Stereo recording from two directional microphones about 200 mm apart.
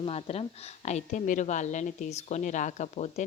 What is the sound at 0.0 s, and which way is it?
Speech, 30° left (ahead or behind).